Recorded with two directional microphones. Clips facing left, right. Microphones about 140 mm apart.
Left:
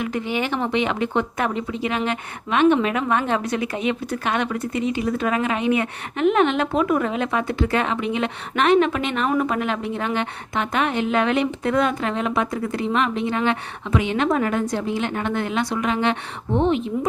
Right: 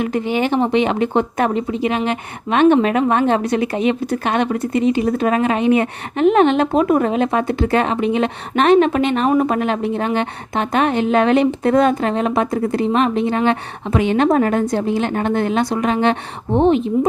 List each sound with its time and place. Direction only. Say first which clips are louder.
0.0 s speech: right 6 dB; 30° right (ahead or behind)
1.8 s a woman's voice: right 3 dB; 20° right (ahead or behind)
2.5 s a woman's voice: right 5 dB; 35° right (ahead or behind)